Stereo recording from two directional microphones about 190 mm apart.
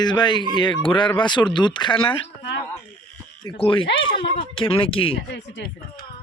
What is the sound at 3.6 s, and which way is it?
Speech, 25° left (ahead or behind).